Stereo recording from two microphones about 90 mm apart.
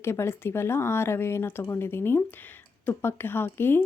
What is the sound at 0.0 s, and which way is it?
Speech, 30° left (ahead or behind).